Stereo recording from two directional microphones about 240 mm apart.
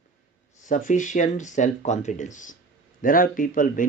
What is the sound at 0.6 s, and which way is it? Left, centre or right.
Speech, left.